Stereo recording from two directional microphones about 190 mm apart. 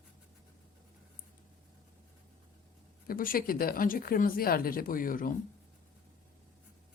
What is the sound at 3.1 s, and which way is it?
Speech, 50° left (ahead or behind).